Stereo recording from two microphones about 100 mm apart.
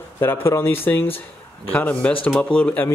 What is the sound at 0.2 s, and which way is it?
Speech, 25° left (ahead or behind).